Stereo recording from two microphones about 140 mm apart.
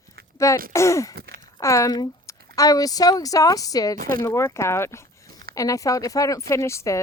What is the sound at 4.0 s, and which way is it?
Speech, 90° right.